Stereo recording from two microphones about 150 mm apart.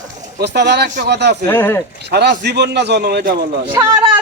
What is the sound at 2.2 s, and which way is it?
A man's voice, 90° right.